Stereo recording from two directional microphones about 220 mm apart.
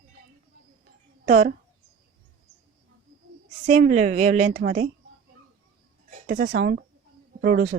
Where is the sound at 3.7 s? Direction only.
35° right (ahead or behind).